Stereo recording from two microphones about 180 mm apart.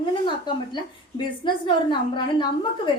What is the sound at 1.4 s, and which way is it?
A woman's voice, 25° left (ahead or behind).